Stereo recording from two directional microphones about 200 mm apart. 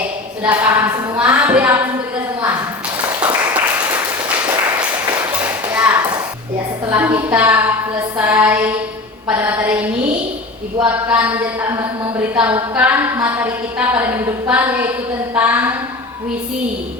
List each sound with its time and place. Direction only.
0.4 s a woman's voice: 10° right (ahead or behind)
3.1 s applause: 10° right (ahead or behind)
4.5 s applause: 20° right (ahead or behind)
5.1 s tap: 5° right (ahead or behind)
6.9 s a woman's voice: 10° right (ahead or behind)